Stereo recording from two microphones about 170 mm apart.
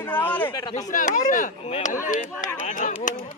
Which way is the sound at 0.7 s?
45° left (ahead or behind).